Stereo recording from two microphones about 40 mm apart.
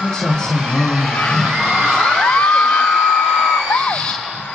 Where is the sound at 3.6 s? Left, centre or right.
Left.